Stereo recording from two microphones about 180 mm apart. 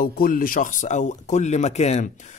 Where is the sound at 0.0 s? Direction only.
50° left (ahead or behind).